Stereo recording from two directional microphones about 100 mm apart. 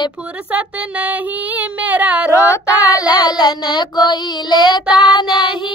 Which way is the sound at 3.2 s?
50° left (ahead or behind).